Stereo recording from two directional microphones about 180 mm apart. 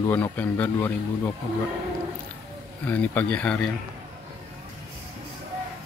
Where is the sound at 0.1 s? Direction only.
10° left (ahead or behind).